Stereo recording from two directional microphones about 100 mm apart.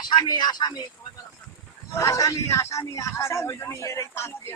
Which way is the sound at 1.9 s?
30° left (ahead or behind).